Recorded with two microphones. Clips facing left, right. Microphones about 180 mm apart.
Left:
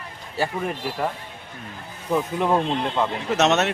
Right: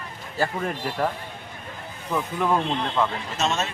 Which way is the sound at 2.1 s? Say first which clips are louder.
Left 3 dB; 20° left (ahead or behind).